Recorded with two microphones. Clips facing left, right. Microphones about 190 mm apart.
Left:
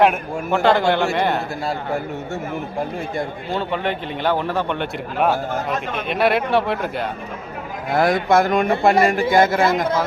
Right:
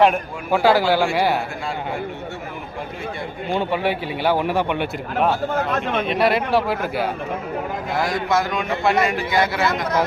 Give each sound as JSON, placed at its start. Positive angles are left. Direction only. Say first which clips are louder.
{"t": 0.0, "sound": "a man's voice", "louder": "even", "side_deg": -5}
{"t": 3.5, "sound": "speech", "louder": "right 3 dB", "side_deg": -15}
{"t": 6.0, "sound": "a man's voice", "louder": "left 1 dB", "side_deg": 0}
{"t": 7.9, "sound": "a man's voice", "louder": "left 6 dB", "side_deg": 55}